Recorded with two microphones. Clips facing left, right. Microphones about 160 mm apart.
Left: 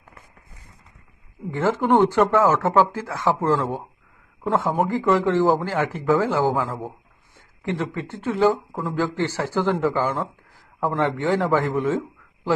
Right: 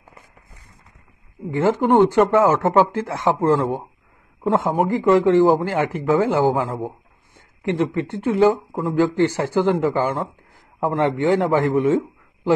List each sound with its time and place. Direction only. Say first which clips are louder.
1.5 s speech: right 3 dB; 15° right (ahead or behind)